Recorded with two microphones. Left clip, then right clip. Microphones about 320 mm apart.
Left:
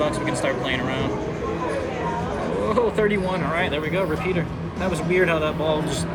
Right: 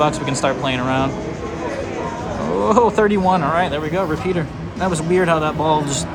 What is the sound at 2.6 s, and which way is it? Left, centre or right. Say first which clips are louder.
Speech: right 7 dB; centre.